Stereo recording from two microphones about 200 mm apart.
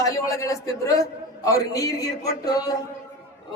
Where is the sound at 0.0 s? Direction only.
15° left (ahead or behind).